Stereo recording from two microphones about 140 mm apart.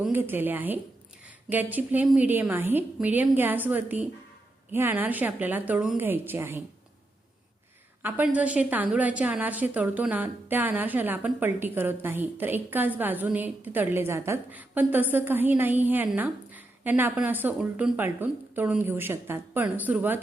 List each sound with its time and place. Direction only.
0.1 s a woman's voice: 15° right (ahead or behind)
8.0 s a woman's voice: 10° right (ahead or behind)
17.9 s a woman's voice: 15° right (ahead or behind)